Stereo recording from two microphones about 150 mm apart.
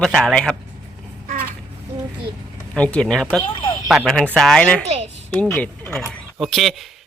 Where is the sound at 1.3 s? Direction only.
70° right (ahead or behind).